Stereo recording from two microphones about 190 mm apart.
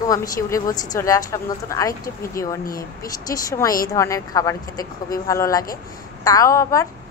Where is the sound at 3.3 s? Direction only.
20° left (ahead or behind).